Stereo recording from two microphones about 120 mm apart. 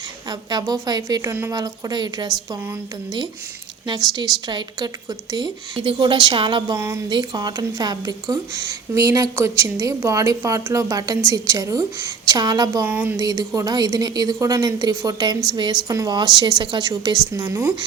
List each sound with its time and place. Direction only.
0.3 s a woman's voice: 35° right (ahead or behind)
3.8 s a woman's voice: 40° right (ahead or behind)
5.7 s a woman's voice: 45° right (ahead or behind)
6.7 s speech: 25° right (ahead or behind)
7.1 s a woman's voice: 40° right (ahead or behind)
12.8 s speech: 15° right (ahead or behind)
13.1 s a woman's voice: 30° right (ahead or behind)